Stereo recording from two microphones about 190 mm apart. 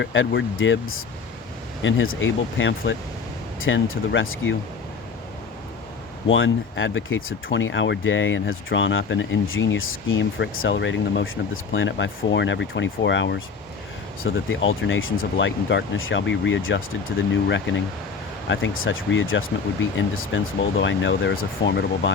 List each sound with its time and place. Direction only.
0.0 s speech: 75° left (ahead or behind)
3.6 s speech: 90° left
6.2 s speech: 90° left; by 13.4 s 70° left (ahead or behind)
14.3 s speech: 90° left
15.4 s speech: 75° left (ahead or behind)
18.4 s speech: 80° left